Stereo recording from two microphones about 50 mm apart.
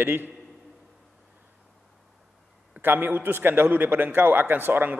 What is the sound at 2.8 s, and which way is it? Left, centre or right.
A man's voice, right.